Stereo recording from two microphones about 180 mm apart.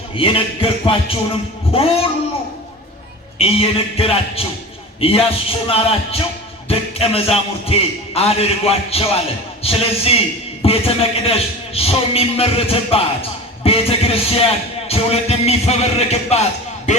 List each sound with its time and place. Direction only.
0.2 s music: 30° left (ahead or behind)
3.3 s music: 30° left (ahead or behind)